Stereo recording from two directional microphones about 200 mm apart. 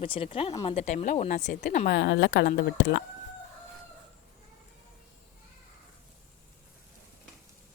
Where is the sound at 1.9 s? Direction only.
60° left (ahead or behind).